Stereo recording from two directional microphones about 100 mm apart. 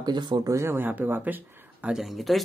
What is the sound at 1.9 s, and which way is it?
Speech, centre (ahead or behind).